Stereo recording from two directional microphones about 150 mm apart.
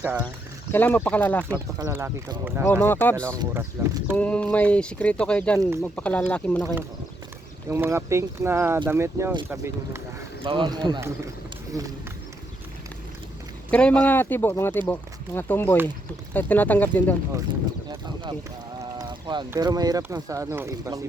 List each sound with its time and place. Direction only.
0.0 s speech: 10° right (ahead or behind)
0.7 s speech: 15° left (ahead or behind)
1.8 s speech: 15° right (ahead or behind)
2.6 s speech: 15° left (ahead or behind)
3.3 s speech: 15° right (ahead or behind)
4.2 s speech: 10° left (ahead or behind)
7.7 s speech: 20° right (ahead or behind)
10.4 s speech: 35° right (ahead or behind)
13.7 s speech: 5° left (ahead or behind)
17.8 s a sound: 30° right (ahead or behind)
18.9 s boat: 30° right (ahead or behind)
19.5 s speech: 25° right (ahead or behind)